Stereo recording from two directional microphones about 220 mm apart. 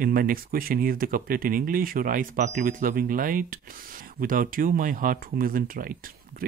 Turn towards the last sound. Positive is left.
turn(degrees=-40)  # may be behind; listen again after turning